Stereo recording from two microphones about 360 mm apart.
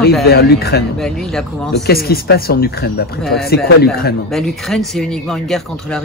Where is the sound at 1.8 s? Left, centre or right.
Left.